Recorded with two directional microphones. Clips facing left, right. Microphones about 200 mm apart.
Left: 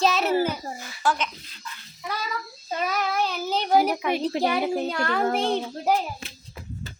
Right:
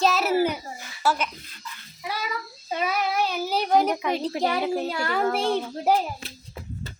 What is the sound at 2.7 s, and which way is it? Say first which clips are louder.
Speech: right 1 dB; 5° right (ahead or behind).